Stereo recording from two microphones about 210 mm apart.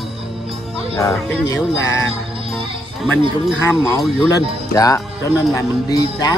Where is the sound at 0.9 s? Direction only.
15° left (ahead or behind).